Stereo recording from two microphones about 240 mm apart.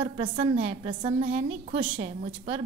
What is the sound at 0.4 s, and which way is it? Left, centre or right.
A woman's voice, right.